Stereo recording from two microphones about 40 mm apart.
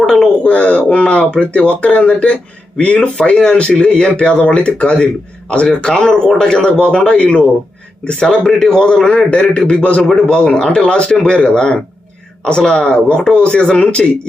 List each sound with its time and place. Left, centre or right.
0.0 s speech: centre
0.4 s speech: left
3.6 s speech: left
9.1 s speech: left
10.0 s a man's voice: centre